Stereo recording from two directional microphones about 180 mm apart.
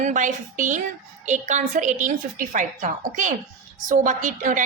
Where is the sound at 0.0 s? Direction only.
45° right (ahead or behind).